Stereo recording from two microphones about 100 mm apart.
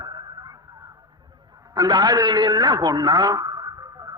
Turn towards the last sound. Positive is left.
turn(degrees=-40)  # may be behind; listen again after turning